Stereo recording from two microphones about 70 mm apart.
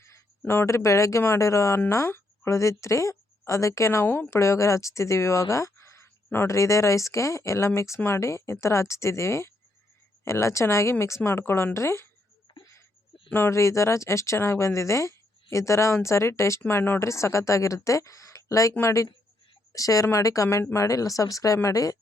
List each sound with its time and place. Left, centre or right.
0.0 s a sound: left
0.5 s speech: left
4.3 s speech: left
6.5 s speech: left
13.5 s speech: left
17.0 s speech: left
19.7 s speech: left